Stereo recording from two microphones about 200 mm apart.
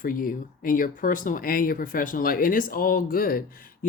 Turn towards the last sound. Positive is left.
turn(degrees=45)  # may be behind; listen again after turning